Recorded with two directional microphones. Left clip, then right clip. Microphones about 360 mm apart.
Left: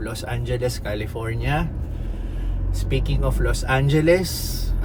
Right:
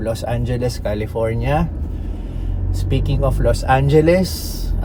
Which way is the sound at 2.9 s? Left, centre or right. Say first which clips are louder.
Right 5 dB; centre.